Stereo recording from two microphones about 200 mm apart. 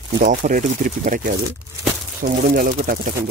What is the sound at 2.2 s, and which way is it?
Speech, 45° right (ahead or behind).